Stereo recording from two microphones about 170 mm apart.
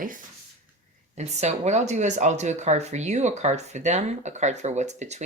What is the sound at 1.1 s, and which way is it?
Speech, 40° right (ahead or behind).